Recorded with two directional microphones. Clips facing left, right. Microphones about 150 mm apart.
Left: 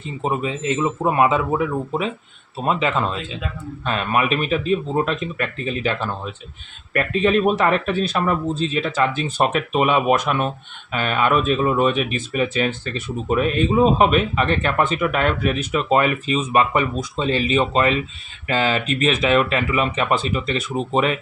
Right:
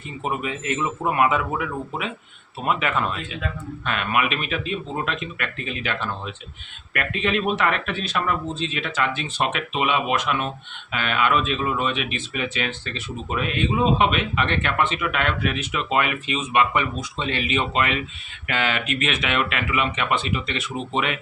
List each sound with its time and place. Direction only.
0.2 s a man's voice: 30° left (ahead or behind)